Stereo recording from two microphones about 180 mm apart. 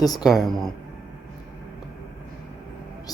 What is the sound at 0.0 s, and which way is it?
Speech, 20° left (ahead or behind).